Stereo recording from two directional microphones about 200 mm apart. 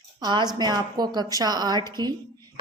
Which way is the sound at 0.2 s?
20° right (ahead or behind).